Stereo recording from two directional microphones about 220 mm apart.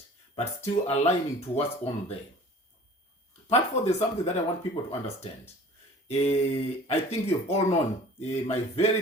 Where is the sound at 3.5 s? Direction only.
30° left (ahead or behind).